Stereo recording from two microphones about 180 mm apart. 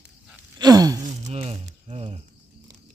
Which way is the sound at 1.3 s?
35° right (ahead or behind).